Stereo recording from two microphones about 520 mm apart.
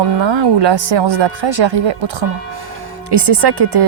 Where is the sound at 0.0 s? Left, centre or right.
Right.